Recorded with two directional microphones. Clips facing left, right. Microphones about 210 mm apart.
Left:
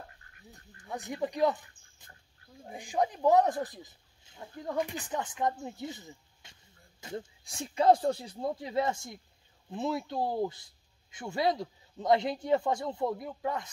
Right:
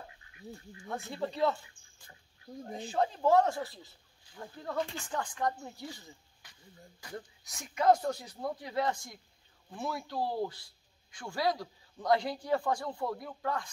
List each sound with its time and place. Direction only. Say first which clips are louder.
0.8 s a man's voice: left 2 dB; 15° left (ahead or behind)